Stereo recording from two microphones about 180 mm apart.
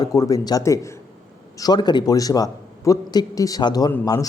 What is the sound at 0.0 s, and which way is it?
A man's voice, 20° left (ahead or behind).